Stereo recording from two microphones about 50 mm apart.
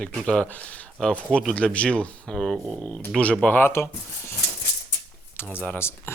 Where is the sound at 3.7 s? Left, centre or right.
Left.